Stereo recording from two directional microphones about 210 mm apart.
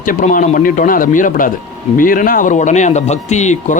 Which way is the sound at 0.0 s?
40° left (ahead or behind).